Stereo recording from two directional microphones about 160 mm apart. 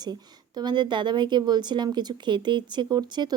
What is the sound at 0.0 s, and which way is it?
Speech, 25° right (ahead or behind).